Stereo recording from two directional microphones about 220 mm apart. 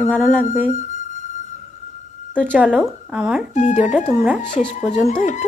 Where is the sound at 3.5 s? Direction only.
35° left (ahead or behind).